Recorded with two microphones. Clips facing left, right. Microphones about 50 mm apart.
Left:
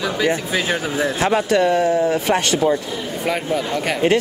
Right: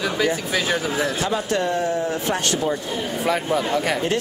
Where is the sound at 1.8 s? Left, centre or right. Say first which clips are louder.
Left 6 dB; centre.